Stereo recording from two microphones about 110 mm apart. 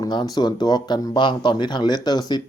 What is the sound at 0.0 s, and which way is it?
Speech, 40° left (ahead or behind).